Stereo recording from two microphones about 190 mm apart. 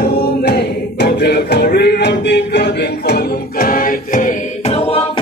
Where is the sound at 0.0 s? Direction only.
55° left (ahead or behind).